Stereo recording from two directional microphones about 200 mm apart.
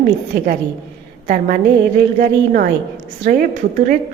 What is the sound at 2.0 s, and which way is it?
Speech, 45° right (ahead or behind).